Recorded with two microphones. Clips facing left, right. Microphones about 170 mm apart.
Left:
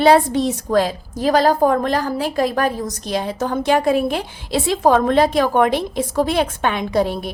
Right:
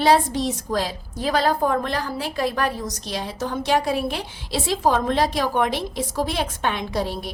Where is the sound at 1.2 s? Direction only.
40° left (ahead or behind).